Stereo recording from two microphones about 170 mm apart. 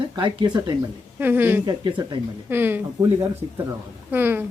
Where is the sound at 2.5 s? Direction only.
15° right (ahead or behind).